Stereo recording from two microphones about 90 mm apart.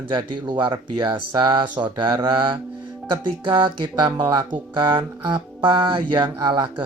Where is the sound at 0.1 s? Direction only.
60° right (ahead or behind).